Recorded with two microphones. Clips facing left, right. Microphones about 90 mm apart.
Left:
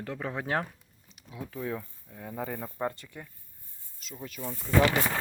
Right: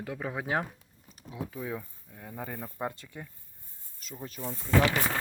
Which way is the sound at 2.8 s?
15° right (ahead or behind).